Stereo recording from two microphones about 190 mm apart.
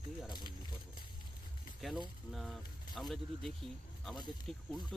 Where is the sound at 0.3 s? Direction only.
20° left (ahead or behind).